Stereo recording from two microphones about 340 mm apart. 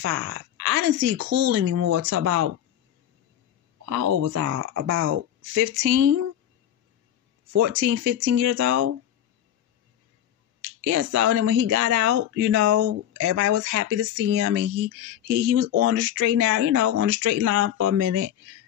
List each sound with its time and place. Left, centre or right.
0.0 s a woman's voice: right
3.8 s speech: right
4.1 s a woman's voice: right
7.5 s speech: right
10.6 s a sound: right
11.1 s a woman's voice: right
15.4 s speech: right